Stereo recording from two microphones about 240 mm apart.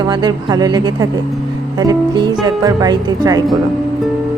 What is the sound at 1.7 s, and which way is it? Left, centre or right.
Music, centre.